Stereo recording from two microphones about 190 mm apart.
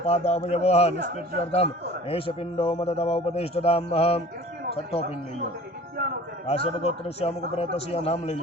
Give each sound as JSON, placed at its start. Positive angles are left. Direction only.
{"t": 0.0, "sound": "a man's voice", "side_deg": 35}
{"t": 6.5, "sound": "a man's voice", "side_deg": 30}